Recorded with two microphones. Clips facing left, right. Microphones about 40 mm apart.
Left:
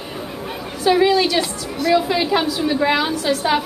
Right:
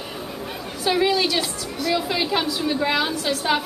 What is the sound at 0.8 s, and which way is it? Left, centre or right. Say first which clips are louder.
A woman's voice: left 5 dB; centre.